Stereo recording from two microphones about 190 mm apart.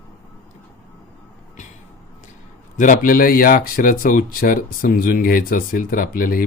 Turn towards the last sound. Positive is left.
turn(degrees=45)  # may be behind; listen again after turning